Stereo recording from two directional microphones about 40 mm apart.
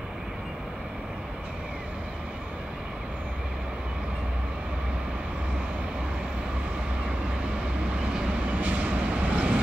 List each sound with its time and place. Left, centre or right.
8.5 s vehicle: right